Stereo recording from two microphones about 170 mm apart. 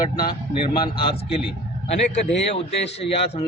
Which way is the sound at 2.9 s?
35° left (ahead or behind).